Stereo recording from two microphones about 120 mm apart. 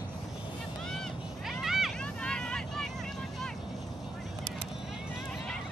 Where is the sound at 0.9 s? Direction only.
Centre (ahead or behind).